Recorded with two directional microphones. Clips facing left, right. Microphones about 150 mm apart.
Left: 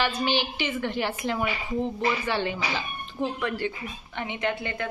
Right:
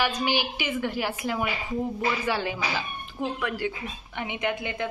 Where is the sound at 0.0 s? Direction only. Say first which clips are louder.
Even; 10° right (ahead or behind).